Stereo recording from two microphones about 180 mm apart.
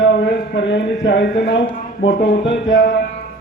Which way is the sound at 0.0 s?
75° left (ahead or behind).